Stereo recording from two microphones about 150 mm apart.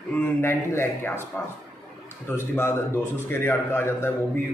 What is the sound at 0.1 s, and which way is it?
A man's voice, 15° left (ahead or behind).